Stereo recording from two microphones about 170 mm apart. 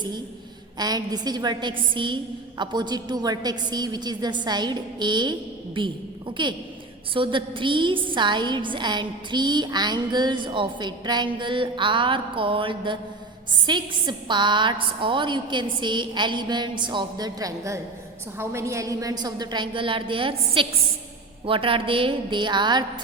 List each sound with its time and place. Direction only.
0.8 s a woman's voice: 25° right (ahead or behind)